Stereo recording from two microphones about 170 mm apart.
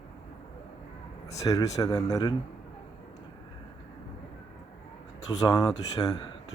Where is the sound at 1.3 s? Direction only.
20° left (ahead or behind).